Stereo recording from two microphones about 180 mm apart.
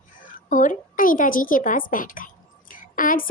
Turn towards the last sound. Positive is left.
turn(degrees=50)  # may be behind; listen again after turning